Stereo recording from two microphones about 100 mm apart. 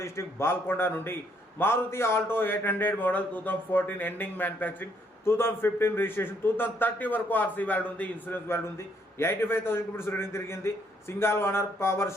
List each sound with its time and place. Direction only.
0.0 s a man's voice: 25° left (ahead or behind)